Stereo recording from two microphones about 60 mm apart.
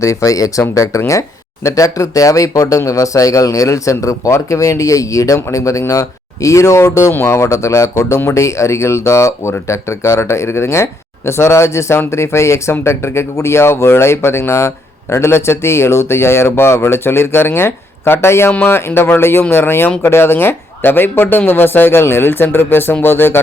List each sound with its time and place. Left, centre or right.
0.0 s speech: left
7.1 s speech: left